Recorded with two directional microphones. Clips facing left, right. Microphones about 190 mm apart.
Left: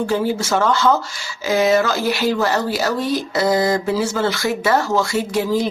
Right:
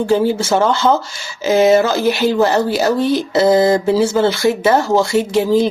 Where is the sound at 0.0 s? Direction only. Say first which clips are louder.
Right 5 dB; 25° right (ahead or behind).